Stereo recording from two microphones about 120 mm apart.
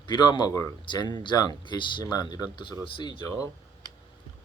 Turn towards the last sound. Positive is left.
turn(degrees=40)  # may be behind; listen again after turning